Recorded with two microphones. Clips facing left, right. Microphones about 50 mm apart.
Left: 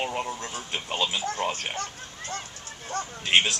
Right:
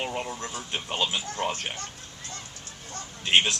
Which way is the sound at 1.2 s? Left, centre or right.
Left.